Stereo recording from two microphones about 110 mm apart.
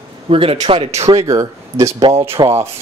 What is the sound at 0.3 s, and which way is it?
Speech, 60° right (ahead or behind).